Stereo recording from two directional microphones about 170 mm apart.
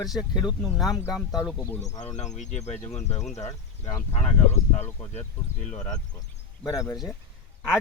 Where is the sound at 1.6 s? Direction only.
10° left (ahead or behind).